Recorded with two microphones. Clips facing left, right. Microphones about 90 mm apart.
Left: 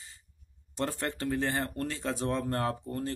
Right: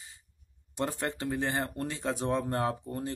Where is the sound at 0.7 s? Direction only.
15° right (ahead or behind).